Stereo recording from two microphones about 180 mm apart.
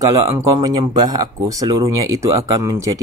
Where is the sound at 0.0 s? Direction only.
20° right (ahead or behind).